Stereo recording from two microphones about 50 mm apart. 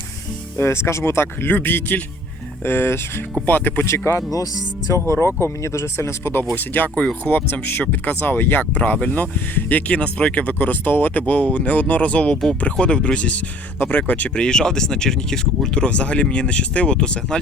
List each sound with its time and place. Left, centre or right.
0.5 s speech: left
1.5 s speech: left
2.6 s speech: left
3.4 s speech: left
3.8 s speech: left
6.6 s speech: left
8.7 s speech: left
13.7 s speech: left
14.3 s speech: centre